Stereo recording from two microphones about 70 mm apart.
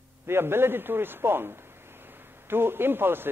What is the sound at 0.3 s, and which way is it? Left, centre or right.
A man's voice, right.